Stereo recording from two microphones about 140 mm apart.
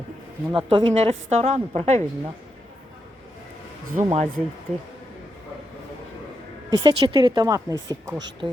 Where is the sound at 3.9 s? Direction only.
50° right (ahead or behind).